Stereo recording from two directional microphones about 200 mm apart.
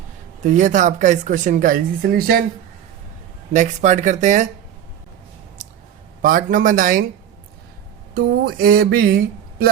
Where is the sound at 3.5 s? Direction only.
35° right (ahead or behind).